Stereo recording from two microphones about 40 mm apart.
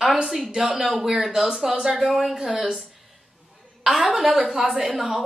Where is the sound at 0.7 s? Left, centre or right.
Centre.